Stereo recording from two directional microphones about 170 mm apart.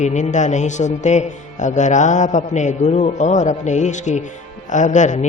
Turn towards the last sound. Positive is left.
turn(degrees=45)  # may be behind; listen again after turning